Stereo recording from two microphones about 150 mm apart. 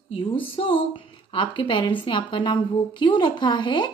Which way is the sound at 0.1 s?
35° left (ahead or behind).